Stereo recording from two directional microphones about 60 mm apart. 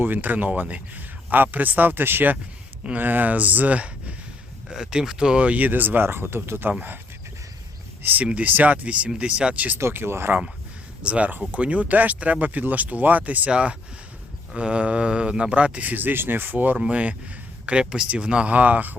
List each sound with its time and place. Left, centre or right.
0.0 s speech: right
4.7 s speech: centre; by 6.7 s right
6.7 s speech: right
8.0 s speech: right
9.7 s speech: right
11.0 s speech: right
16.7 s speech: centre